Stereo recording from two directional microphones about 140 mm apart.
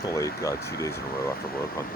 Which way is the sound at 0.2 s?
20° left (ahead or behind).